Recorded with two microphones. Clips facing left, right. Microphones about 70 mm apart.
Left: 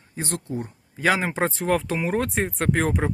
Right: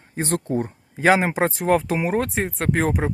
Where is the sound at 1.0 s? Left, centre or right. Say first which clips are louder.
Right 5 dB; right.